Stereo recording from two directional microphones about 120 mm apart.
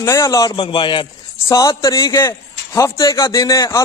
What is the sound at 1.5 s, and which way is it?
A man's voice, 30° left (ahead or behind).